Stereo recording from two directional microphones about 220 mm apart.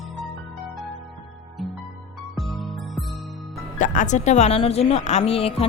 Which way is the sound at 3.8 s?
35° left (ahead or behind).